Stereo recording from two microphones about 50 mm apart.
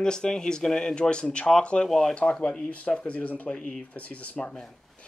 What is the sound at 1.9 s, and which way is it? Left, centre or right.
Speech, centre.